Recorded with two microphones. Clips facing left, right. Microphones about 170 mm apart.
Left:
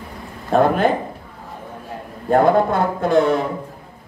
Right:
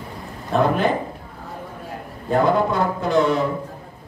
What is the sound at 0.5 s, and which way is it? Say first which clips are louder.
Speech: left 3 dB; 50° left (ahead or behind).